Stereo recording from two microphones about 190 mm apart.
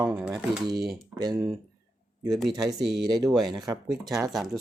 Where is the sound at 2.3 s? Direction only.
Centre (ahead or behind).